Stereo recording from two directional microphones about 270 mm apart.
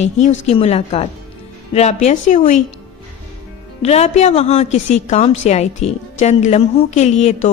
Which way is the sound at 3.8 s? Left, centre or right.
Left.